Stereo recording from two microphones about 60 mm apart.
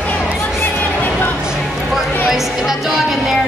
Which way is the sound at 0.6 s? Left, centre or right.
Left.